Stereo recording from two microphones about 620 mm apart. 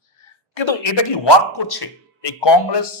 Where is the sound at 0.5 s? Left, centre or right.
Left.